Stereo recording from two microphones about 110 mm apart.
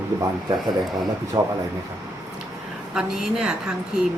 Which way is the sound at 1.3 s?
35° right (ahead or behind).